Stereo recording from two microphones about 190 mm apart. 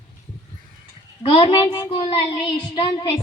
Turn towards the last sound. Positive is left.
turn(degrees=25)  # may be behind; listen again after turning